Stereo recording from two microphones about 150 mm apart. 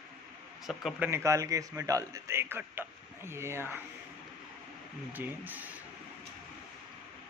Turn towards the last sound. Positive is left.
turn(degrees=-10)  # may be behind; listen again after turning